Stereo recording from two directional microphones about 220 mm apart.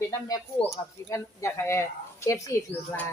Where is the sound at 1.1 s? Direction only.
15° left (ahead or behind).